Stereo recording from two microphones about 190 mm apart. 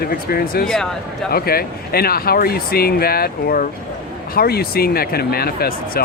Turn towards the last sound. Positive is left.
turn(degrees=55)  # may be behind; listen again after turning